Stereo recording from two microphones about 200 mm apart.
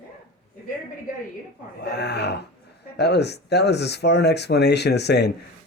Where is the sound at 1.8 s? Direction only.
55° left (ahead or behind).